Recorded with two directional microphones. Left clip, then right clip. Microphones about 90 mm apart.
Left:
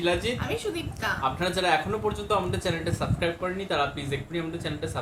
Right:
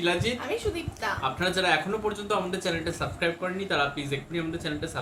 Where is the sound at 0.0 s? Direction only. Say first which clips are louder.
Even; 20° right (ahead or behind).